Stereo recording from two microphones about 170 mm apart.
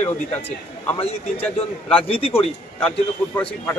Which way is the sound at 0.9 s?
35° left (ahead or behind).